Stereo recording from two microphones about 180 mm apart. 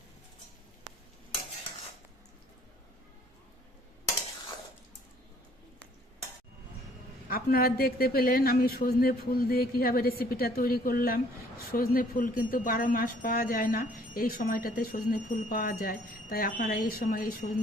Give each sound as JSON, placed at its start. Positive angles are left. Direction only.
{"t": 7.3, "sound": "a man's voice", "side_deg": 55}